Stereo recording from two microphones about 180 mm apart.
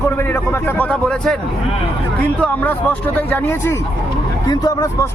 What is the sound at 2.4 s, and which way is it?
Speech, 10° left (ahead or behind).